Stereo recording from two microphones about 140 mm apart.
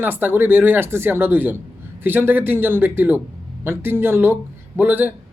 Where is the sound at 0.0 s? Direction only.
15° right (ahead or behind).